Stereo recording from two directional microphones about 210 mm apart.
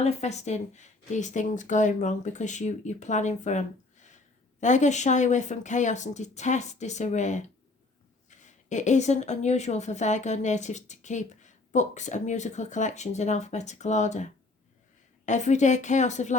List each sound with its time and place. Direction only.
0.0 s speech: 30° left (ahead or behind)
15.3 s speech: 35° left (ahead or behind)